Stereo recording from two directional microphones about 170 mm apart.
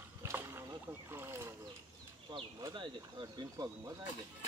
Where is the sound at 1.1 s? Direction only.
15° right (ahead or behind).